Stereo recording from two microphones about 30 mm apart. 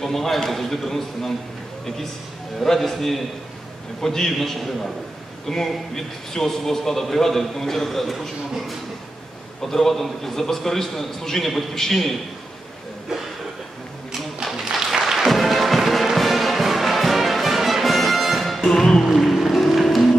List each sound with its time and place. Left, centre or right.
0.0 s a man's voice: centre
2.8 s a man's voice: centre
4.4 s a man's voice: centre
9.6 s a man's voice: centre
14.4 s applause: centre
14.9 s music: centre
18.7 s music: centre
19.1 s music: centre